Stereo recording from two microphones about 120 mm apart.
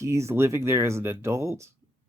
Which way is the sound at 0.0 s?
25° right (ahead or behind).